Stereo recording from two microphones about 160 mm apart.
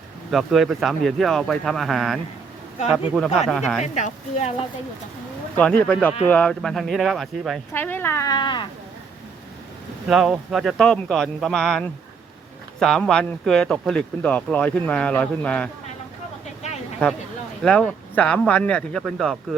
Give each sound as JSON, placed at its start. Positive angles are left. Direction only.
{"t": 0.3, "sound": "speech", "side_deg": 0}
{"t": 3.5, "sound": "speech", "side_deg": 0}
{"t": 3.9, "sound": "speech", "side_deg": 45}
{"t": 5.5, "sound": "speech", "side_deg": 5}
{"t": 7.7, "sound": "speech", "side_deg": 10}
{"t": 10.1, "sound": "speech", "side_deg": 0}
{"t": 17.6, "sound": "speech", "side_deg": 5}